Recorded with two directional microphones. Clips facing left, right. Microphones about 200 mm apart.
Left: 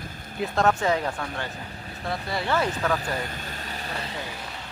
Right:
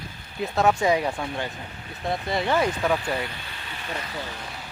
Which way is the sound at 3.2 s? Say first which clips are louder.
Even; 45° left (ahead or behind).